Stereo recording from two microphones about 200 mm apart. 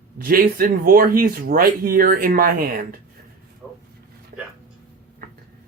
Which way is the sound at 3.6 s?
Centre (ahead or behind).